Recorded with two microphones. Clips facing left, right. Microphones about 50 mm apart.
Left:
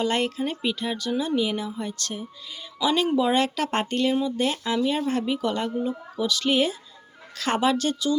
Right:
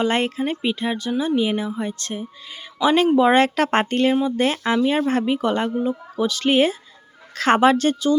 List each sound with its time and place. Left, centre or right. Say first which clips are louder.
0.0 s speech: right 4 dB; right
2.8 s speech: right 6 dB; right